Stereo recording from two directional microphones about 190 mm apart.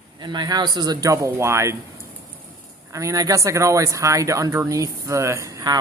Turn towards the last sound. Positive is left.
turn(degrees=-20)  # may be behind; listen again after turning